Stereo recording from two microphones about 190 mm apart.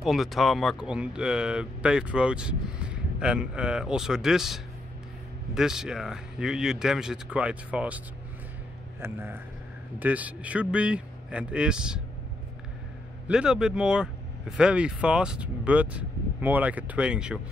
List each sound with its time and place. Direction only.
0.0 s a man's voice: centre (ahead or behind)
9.0 s speech: 10° right (ahead or behind)
13.3 s a man's voice: 5° right (ahead or behind)